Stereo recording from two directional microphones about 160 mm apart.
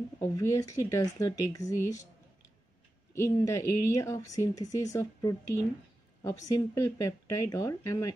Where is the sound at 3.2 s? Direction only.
20° left (ahead or behind).